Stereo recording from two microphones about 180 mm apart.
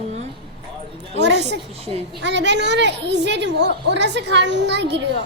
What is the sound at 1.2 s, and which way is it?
A woman's voice, 75° right (ahead or behind).